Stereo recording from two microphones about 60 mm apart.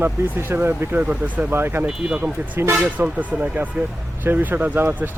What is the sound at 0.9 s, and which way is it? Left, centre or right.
Speech, right.